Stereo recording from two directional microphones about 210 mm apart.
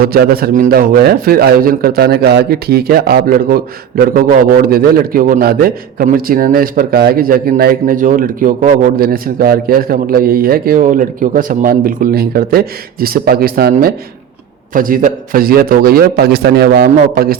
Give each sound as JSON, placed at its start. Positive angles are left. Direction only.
{"t": 0.0, "sound": "a man's voice", "side_deg": -45}